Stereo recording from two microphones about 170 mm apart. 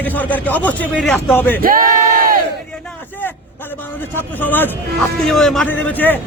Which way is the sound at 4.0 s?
10° left (ahead or behind).